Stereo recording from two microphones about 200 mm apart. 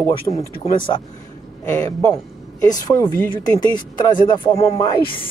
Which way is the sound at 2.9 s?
20° left (ahead or behind).